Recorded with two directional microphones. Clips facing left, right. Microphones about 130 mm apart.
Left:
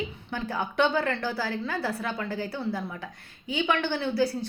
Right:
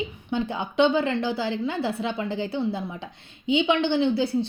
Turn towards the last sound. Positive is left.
turn(degrees=-20)  # may be behind; listen again after turning